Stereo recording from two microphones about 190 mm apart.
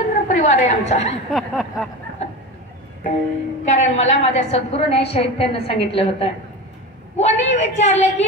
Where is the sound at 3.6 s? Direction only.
35° left (ahead or behind).